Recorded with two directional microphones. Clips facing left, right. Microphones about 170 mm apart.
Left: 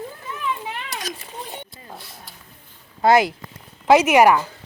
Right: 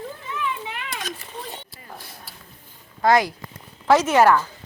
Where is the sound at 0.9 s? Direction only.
40° left (ahead or behind).